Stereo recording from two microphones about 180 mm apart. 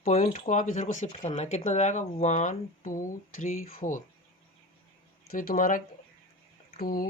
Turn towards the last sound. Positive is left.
turn(degrees=55)  # may be behind; listen again after turning